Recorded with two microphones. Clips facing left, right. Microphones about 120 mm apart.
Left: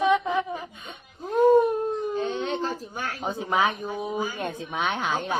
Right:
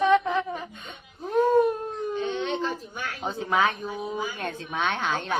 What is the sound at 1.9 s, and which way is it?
Baby cry, 35° left (ahead or behind).